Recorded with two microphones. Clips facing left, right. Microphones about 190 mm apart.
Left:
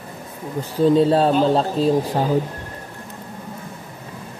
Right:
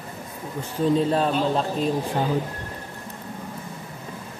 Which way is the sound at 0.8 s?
35° left (ahead or behind).